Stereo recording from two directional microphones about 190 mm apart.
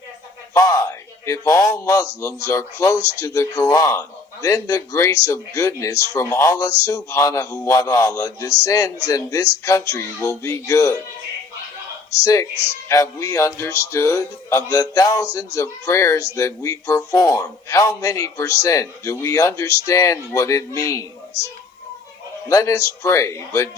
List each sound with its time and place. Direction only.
0.5 s speech: 15° left (ahead or behind)
12.2 s speech: 15° left (ahead or behind)
22.4 s speech: 15° left (ahead or behind)